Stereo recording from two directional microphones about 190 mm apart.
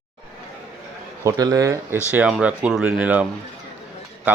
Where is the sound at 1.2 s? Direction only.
20° right (ahead or behind).